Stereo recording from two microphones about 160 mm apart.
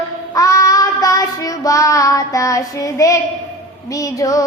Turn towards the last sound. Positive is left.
turn(degrees=20)  # may be behind; listen again after turning